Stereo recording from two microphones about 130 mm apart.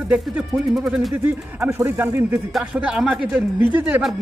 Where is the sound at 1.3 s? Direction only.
20° right (ahead or behind).